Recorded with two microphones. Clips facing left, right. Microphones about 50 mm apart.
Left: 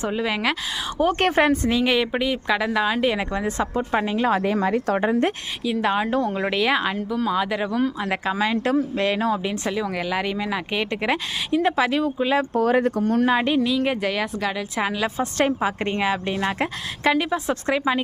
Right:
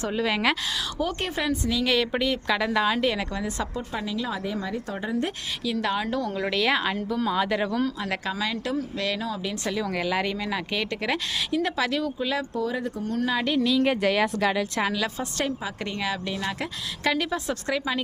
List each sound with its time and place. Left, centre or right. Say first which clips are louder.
0.1 s a woman's voice: right 2 dB; centre
1.2 s speech: left 8 dB; left
1.8 s a woman's voice: left 3 dB; left
5.6 s a woman's voice: left 5 dB; left
12.5 s speech: left 9 dB; left
13.6 s speech: left 1 dB; centre
14.6 s a woman's voice: left 2 dB; centre
15.2 s a woman's voice: left 7 dB; left